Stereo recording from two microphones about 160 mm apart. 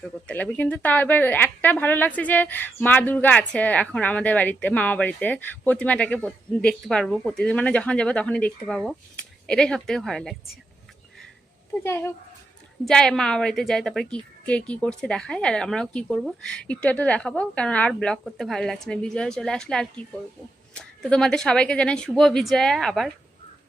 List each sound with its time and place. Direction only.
0.3 s a woman's voice: 10° left (ahead or behind)
11.7 s a woman's voice: 15° left (ahead or behind)
12.8 s a woman's voice: 5° left (ahead or behind)